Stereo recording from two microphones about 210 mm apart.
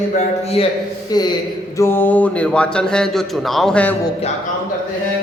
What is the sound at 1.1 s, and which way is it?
A man's voice, 20° left (ahead or behind).